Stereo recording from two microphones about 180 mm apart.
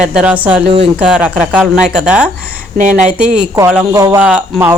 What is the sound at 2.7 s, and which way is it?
Speech, 45° right (ahead or behind).